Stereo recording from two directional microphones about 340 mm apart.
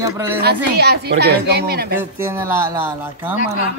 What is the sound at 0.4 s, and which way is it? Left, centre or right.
A woman's voice, right.